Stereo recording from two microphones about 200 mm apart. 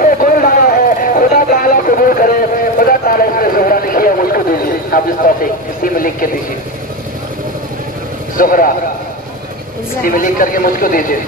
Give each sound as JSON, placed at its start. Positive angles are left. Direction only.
{"t": 0.0, "sound": "a sound", "side_deg": 40}
{"t": 8.4, "sound": "speech", "side_deg": 45}
{"t": 10.0, "sound": "speech", "side_deg": 45}